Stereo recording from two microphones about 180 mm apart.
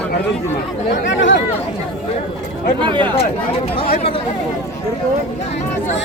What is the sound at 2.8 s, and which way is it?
Speech, 25° right (ahead or behind).